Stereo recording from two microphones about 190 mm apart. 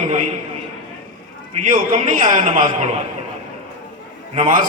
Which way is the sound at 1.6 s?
40° right (ahead or behind).